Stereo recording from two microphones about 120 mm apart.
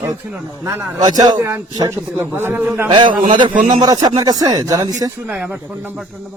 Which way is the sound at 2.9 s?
40° right (ahead or behind).